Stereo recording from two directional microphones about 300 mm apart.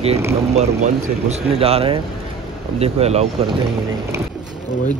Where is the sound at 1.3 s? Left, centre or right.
Centre.